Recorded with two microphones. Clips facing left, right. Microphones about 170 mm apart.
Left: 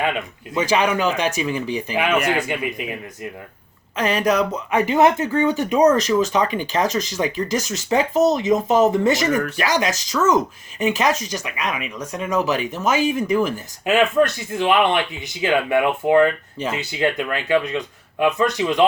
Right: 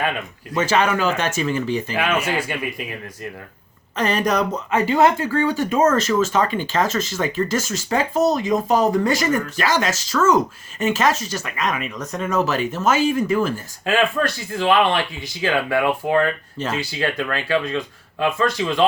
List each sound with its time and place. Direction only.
0.0 s speech: 15° left (ahead or behind)
4.7 s speech: 15° left (ahead or behind)